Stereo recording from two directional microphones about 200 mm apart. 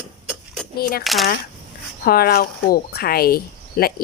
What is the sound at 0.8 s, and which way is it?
Speech, 50° left (ahead or behind).